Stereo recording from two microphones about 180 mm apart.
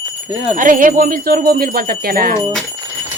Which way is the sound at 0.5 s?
50° right (ahead or behind).